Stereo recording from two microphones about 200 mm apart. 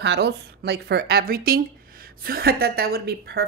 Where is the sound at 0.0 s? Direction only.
60° right (ahead or behind).